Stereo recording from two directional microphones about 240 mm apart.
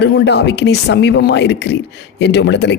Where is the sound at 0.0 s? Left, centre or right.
Left.